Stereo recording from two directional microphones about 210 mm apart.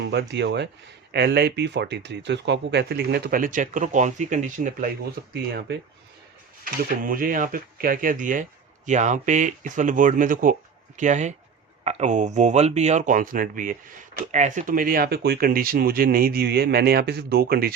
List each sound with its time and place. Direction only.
0.0 s speech: 55° right (ahead or behind); by 4.9 s 40° right (ahead or behind)
5.3 s speech: 50° right (ahead or behind)
6.8 s speech: 40° right (ahead or behind)